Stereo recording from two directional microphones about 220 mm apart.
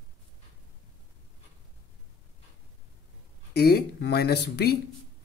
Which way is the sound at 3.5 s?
45° left (ahead or behind).